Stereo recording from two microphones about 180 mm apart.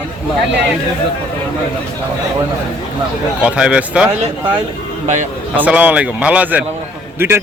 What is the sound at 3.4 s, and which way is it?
Speech, 5° right (ahead or behind).